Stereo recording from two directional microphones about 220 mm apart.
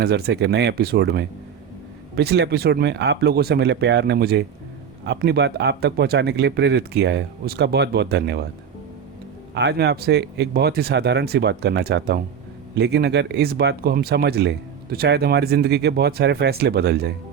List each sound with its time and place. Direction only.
0.0 s speech: 45° right (ahead or behind)
9.6 s speech: 50° right (ahead or behind)